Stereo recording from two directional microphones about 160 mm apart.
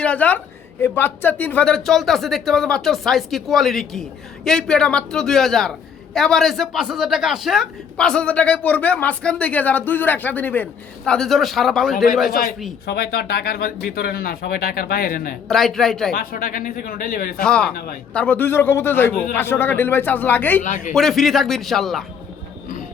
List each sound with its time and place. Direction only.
0.0 s speech: 10° left (ahead or behind)
12.3 s a man's voice: 65° left (ahead or behind)
12.8 s speech: 80° left; by 15.4 s 60° left (ahead or behind)
15.4 s speech: centre (ahead or behind)
16.1 s a man's voice: 65° left (ahead or behind)
17.4 s speech: 5° left (ahead or behind)
20.7 s speech: 50° left (ahead or behind)
20.9 s speech: centre (ahead or behind)